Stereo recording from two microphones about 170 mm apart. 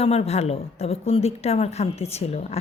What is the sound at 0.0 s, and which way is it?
A woman's voice, 35° left (ahead or behind).